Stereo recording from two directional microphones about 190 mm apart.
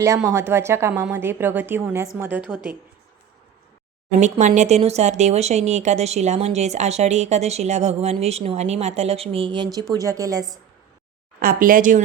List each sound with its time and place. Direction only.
0.0 s a woman's voice: 15° right (ahead or behind)
4.2 s speech: 40° right (ahead or behind); by 10.6 s 20° right (ahead or behind)
11.3 s speech: 50° right (ahead or behind)